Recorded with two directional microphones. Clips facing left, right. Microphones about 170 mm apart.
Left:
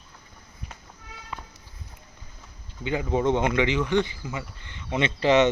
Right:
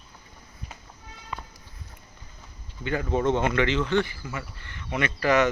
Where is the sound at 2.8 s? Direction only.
15° left (ahead or behind).